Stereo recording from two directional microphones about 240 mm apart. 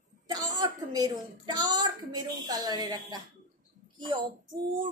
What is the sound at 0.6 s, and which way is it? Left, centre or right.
A woman's voice, centre.